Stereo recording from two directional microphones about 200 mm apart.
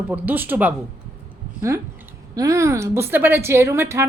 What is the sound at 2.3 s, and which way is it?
A woman's voice, 15° right (ahead or behind).